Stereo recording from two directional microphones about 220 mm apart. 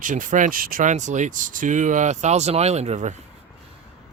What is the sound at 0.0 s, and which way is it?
Speech, 35° right (ahead or behind).